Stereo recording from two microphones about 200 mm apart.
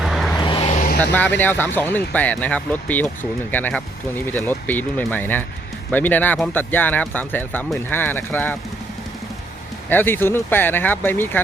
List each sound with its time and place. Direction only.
0.0 s vehicle: centre (ahead or behind)
0.3 s vehicle: 25° left (ahead or behind)
1.4 s speech: 10° left (ahead or behind)
9.9 s speech: 10° left (ahead or behind)